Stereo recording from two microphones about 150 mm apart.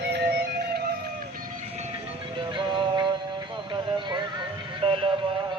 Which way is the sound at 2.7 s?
30° right (ahead or behind).